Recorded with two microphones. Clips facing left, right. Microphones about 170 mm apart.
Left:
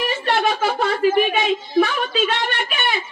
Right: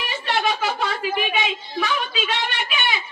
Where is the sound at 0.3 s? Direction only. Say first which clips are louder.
Left 2 dB; 50° left (ahead or behind).